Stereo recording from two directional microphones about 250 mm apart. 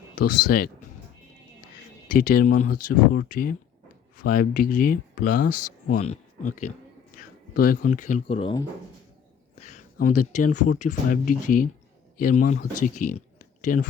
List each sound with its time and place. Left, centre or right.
0.3 s speech: left
2.0 s speech: left